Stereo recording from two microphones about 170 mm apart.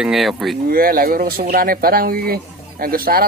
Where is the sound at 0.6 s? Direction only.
60° right (ahead or behind).